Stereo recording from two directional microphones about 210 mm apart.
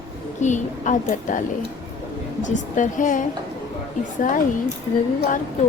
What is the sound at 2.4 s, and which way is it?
Speech, 35° left (ahead or behind).